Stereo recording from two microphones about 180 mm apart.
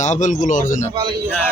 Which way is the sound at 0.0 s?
40° left (ahead or behind).